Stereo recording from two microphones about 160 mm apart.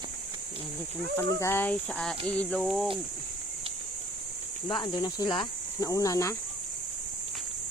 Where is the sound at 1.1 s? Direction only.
15° left (ahead or behind).